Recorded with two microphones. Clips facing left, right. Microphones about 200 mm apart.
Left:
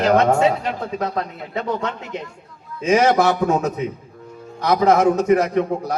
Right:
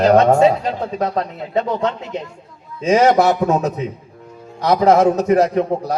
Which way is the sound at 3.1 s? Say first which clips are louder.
Right 2 dB; 35° right (ahead or behind).